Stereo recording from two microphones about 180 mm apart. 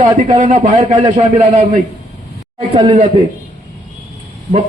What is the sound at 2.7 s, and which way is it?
Speech, 30° right (ahead or behind).